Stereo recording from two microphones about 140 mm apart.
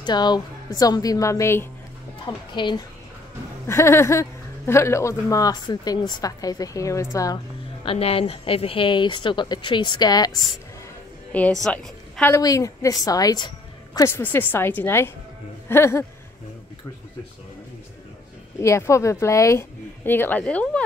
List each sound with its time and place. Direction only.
0.0 s speech: 30° left (ahead or behind)
2.2 s speech: 35° left (ahead or behind)
3.6 s speech: 20° left (ahead or behind)
7.8 s speech: 40° left (ahead or behind); by 10.4 s 25° left (ahead or behind)
11.3 s a woman's voice: 5° left (ahead or behind)
12.4 s a woman's voice: 25° left (ahead or behind)
18.6 s speech: 20° left (ahead or behind)